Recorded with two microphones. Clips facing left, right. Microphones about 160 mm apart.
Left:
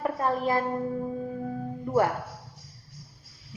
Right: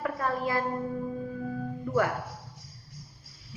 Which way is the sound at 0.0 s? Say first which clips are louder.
Left 3 dB; 25° left (ahead or behind).